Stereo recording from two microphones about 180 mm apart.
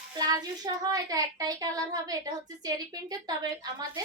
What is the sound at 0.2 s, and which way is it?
Speech, 20° right (ahead or behind).